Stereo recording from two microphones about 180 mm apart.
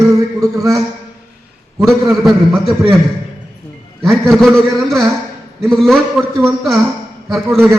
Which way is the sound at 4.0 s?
Centre (ahead or behind).